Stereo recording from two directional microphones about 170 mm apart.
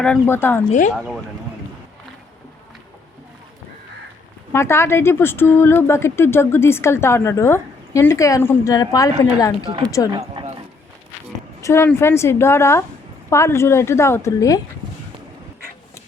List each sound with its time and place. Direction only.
0.0 s speech: 10° left (ahead or behind)
0.7 s speech: 45° left (ahead or behind)
0.9 s speech: centre (ahead or behind)
4.5 s speech: 15° left (ahead or behind)
9.6 s speech: 30° right (ahead or behind)
10.2 s a sound: 35° right (ahead or behind)
11.6 s speech: 15° left (ahead or behind)